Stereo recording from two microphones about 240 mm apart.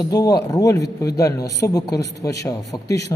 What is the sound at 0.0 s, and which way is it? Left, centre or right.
Speech, centre.